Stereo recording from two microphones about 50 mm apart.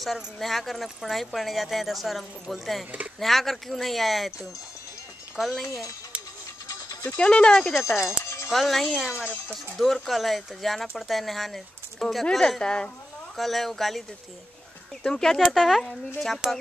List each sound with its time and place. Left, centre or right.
0.0 s speech: centre
5.4 s speech: centre
7.1 s speech: left
7.5 s a woman's voice: centre
7.8 s speech: left
8.2 s music: left
8.5 s a woman's voice: centre
13.4 s speech: centre
15.0 s a woman's voice: centre
16.4 s speech: centre